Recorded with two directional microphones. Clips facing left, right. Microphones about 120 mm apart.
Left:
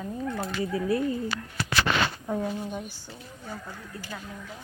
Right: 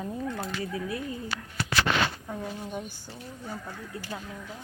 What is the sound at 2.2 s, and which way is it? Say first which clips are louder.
Speech: left 6 dB; 15° left (ahead or behind).